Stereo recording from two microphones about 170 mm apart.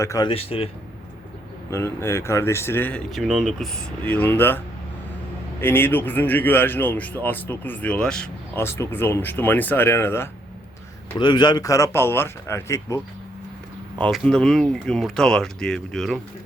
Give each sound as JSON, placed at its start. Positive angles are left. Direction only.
{"t": 0.0, "sound": "speech", "side_deg": 20}
{"t": 0.3, "sound": "speech", "side_deg": 35}
{"t": 1.7, "sound": "speech", "side_deg": 15}
{"t": 4.0, "sound": "speech", "side_deg": 10}
{"t": 11.2, "sound": "speech", "side_deg": 25}
{"t": 14.0, "sound": "speech", "side_deg": 5}